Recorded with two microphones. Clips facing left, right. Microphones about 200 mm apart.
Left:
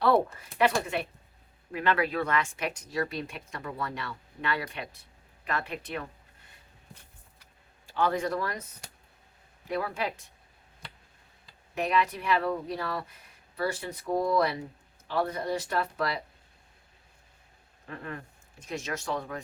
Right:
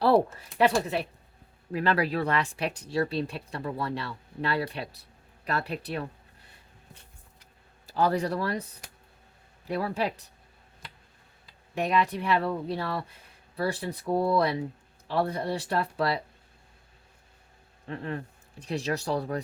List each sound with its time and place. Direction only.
0.6 s speech: 35° right (ahead or behind)
7.9 s speech: 40° right (ahead or behind)
9.6 s speech: 35° right (ahead or behind)
11.7 s speech: 30° right (ahead or behind)
17.8 s speech: 30° right (ahead or behind)